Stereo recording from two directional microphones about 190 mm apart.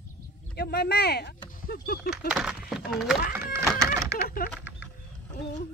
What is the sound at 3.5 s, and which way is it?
Chicken, 15° right (ahead or behind).